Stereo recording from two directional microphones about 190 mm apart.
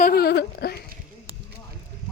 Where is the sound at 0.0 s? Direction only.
55° left (ahead or behind).